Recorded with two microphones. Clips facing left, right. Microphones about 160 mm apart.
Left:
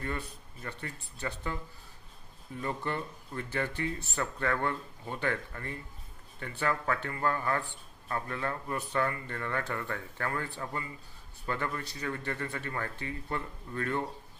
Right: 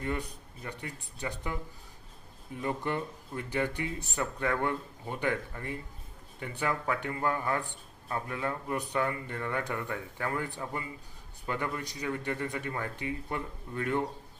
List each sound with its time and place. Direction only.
0.0 s speech: 15° right (ahead or behind)
2.6 s speech: 15° right (ahead or behind)